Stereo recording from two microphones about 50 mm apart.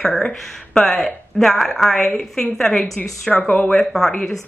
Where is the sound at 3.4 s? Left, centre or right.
Left.